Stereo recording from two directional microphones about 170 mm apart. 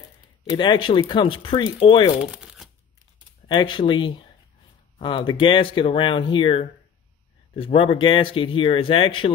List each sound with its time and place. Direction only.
0.6 s speech: 30° left (ahead or behind)
2.3 s crumpling: 5° right (ahead or behind)
3.4 s speech: 25° left (ahead or behind)